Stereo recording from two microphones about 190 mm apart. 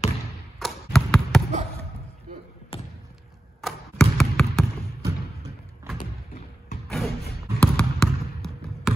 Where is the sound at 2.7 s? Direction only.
30° left (ahead or behind).